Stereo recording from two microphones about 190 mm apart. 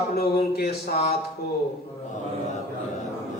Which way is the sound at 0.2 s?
55° left (ahead or behind).